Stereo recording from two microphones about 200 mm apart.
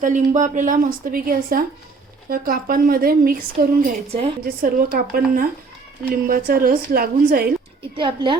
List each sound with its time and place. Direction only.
0.0 s a woman's voice: 40° right (ahead or behind)
7.9 s a woman's voice: 25° right (ahead or behind)